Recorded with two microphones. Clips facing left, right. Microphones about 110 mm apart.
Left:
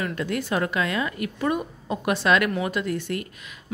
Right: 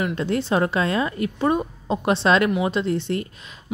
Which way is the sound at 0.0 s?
25° right (ahead or behind).